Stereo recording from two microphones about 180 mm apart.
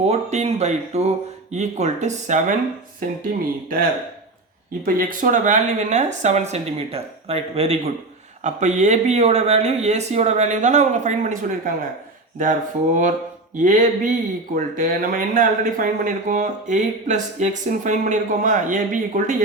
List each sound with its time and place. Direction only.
0.0 s speech: 35° right (ahead or behind)
4.9 s speech: 50° right (ahead or behind)